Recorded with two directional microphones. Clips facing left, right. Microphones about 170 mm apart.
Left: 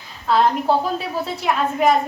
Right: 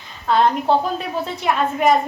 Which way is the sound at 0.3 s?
Centre (ahead or behind).